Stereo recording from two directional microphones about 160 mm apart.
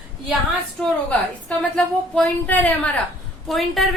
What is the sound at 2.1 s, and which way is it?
A man's voice, 10° left (ahead or behind).